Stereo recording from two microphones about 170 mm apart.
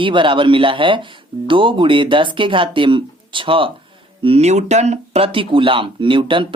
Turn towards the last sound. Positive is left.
turn(degrees=-30)  # may be behind; listen again after turning